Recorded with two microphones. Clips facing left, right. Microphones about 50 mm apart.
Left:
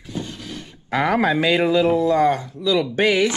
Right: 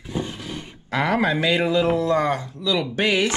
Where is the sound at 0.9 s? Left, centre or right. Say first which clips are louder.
Left 2 dB; left.